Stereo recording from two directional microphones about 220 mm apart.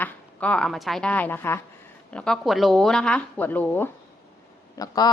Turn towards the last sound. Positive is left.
turn(degrees=20)  # may be behind; listen again after turning